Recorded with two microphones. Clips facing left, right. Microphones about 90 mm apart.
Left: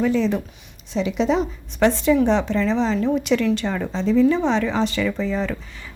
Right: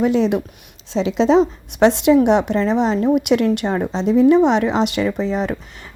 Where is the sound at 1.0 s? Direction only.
90° right.